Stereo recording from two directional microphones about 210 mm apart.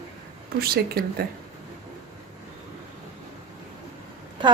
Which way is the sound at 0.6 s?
45° right (ahead or behind).